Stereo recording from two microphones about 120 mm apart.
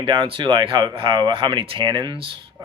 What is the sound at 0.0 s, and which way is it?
Speech, 45° right (ahead or behind).